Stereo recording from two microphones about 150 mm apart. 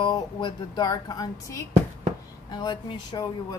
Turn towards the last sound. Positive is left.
turn(degrees=30)  # may be behind; listen again after turning